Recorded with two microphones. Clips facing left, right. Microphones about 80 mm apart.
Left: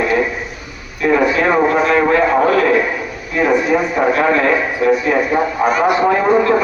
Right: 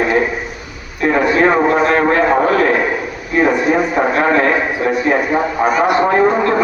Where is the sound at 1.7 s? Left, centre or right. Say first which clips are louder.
Even; right.